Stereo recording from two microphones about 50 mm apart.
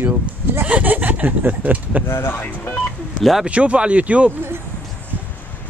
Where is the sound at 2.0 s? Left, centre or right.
Left.